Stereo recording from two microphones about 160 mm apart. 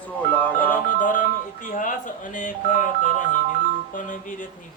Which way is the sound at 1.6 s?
55° left (ahead or behind).